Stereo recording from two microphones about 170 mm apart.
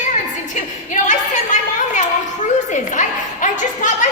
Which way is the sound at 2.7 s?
50° left (ahead or behind).